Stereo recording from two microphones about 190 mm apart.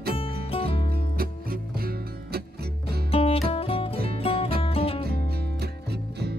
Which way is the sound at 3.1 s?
30° left (ahead or behind).